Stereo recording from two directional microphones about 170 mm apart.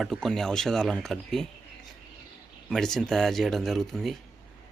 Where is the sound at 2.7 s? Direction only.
Centre (ahead or behind).